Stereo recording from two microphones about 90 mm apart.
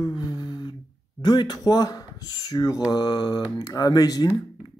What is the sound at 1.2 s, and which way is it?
Speech, 55° left (ahead or behind).